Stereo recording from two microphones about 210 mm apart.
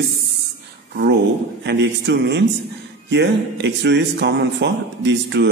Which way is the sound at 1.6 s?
55° right (ahead or behind).